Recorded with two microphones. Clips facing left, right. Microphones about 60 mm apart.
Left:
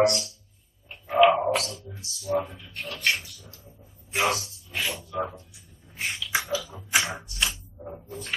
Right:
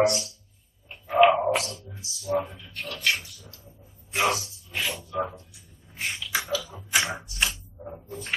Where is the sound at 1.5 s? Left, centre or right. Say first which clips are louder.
Even; centre.